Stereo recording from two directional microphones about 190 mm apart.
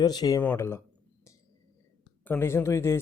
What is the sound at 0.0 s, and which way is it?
Speech, 20° left (ahead or behind).